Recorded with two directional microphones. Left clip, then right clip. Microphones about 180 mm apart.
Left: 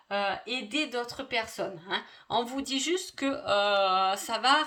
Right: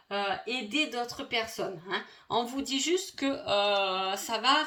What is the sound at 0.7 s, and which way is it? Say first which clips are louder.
Speech: right 1 dB; 45° left (ahead or behind).